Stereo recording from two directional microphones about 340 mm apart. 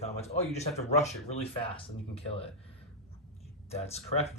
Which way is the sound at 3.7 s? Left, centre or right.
Centre.